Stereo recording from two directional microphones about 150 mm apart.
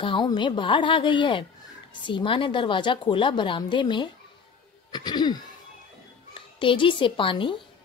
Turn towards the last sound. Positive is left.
turn(degrees=35)  # may be behind; listen again after turning